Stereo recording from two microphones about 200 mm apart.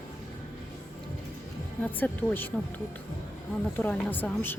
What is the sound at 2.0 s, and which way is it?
Speech, 5° left (ahead or behind).